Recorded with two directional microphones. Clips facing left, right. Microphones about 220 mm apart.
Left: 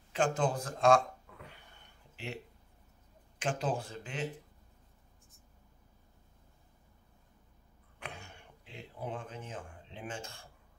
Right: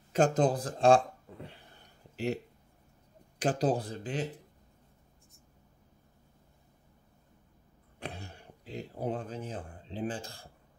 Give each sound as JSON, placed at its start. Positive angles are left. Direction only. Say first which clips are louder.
{"t": 0.1, "sound": "a sound", "louder": "right 5 dB", "side_deg": -40}
{"t": 3.3, "sound": "speech", "louder": "right 6 dB", "side_deg": -35}
{"t": 8.0, "sound": "speech", "louder": "right 5 dB", "side_deg": -35}